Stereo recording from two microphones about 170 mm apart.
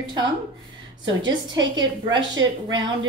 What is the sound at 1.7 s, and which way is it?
A woman's voice, 25° right (ahead or behind).